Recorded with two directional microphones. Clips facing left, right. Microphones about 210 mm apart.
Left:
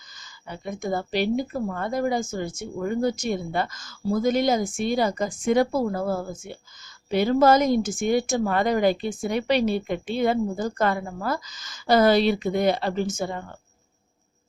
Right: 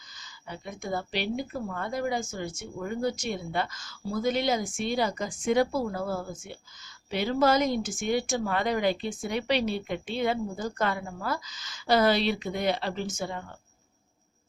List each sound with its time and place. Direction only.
0.2 s speech: 45° left (ahead or behind)